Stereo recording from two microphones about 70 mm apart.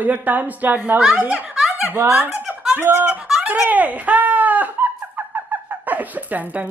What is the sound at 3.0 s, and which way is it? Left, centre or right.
Music, centre.